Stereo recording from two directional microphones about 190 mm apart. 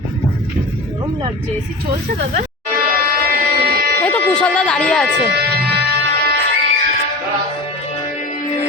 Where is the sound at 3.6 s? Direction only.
55° right (ahead or behind).